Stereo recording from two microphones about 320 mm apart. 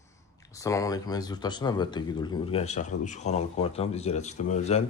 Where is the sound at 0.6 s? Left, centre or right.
Centre.